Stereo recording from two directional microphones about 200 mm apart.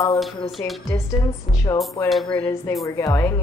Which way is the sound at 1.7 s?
20° left (ahead or behind).